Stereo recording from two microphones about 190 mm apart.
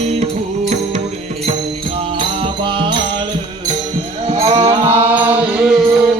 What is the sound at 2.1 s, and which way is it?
Music, 25° right (ahead or behind).